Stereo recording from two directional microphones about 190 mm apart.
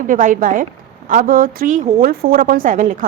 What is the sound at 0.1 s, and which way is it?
A woman's voice, 45° right (ahead or behind).